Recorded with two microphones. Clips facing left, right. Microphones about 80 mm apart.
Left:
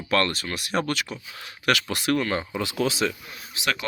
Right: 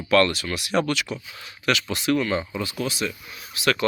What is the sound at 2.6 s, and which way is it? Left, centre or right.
Speech, left.